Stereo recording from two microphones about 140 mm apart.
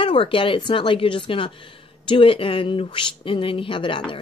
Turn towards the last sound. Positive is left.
turn(degrees=35)  # may be behind; listen again after turning